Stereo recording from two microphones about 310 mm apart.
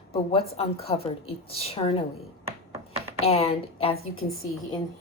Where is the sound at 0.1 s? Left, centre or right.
Centre.